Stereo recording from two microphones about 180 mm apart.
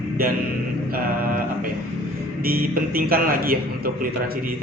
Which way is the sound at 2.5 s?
55° right (ahead or behind).